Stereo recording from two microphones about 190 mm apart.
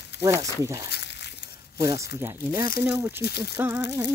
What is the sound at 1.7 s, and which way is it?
Speech, 15° right (ahead or behind).